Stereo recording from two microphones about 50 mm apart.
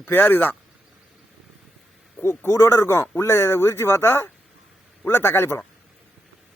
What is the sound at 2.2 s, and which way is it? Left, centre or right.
A man's voice, left.